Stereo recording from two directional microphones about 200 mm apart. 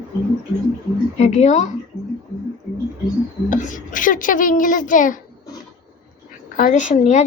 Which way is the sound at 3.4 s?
40° left (ahead or behind).